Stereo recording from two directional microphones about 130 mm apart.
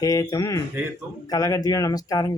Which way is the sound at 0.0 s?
30° left (ahead or behind).